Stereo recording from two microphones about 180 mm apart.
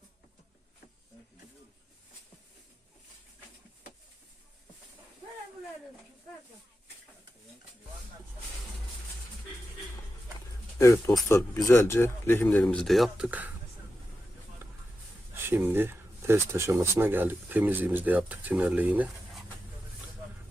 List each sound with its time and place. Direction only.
10.8 s speech: 15° left (ahead or behind); by 13.5 s 5° right (ahead or behind)
15.4 s speech: 10° right (ahead or behind)